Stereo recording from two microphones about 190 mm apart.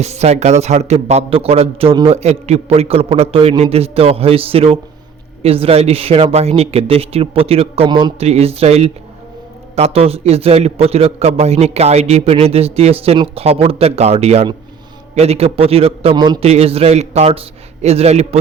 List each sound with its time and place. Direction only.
0.0 s a man's voice: 35° right (ahead or behind)